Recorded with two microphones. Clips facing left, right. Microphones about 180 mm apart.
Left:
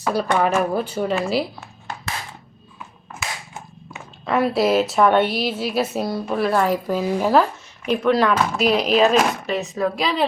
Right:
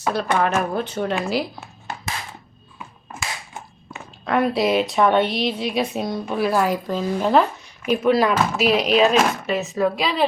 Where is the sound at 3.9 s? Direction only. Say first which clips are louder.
Even; 5° left (ahead or behind).